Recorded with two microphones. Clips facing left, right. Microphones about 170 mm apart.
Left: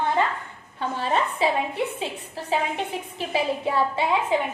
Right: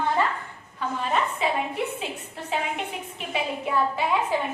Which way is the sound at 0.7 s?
30° left (ahead or behind).